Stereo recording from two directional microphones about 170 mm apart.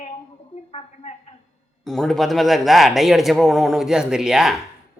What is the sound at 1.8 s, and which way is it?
A man's voice, centre (ahead or behind).